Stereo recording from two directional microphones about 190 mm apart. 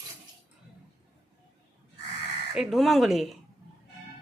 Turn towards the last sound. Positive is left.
turn(degrees=0)  # may be behind; listen again after turning